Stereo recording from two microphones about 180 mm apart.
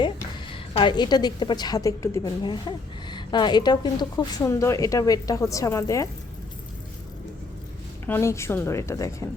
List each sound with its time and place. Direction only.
0.0 s a woman's voice: 30° left (ahead or behind)
8.0 s a woman's voice: 15° left (ahead or behind)